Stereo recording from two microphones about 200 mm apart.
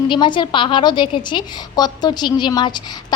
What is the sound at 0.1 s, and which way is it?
A woman's voice, 25° left (ahead or behind).